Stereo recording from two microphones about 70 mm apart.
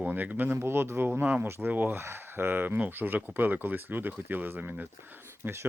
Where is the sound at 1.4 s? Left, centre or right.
Right.